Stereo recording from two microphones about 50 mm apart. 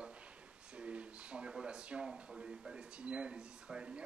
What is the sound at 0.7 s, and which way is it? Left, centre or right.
Speech, right.